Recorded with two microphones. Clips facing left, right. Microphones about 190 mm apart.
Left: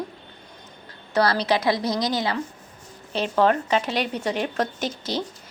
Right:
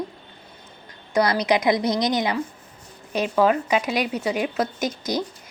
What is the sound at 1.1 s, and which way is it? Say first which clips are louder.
A woman's voice: right 1 dB; 15° right (ahead or behind).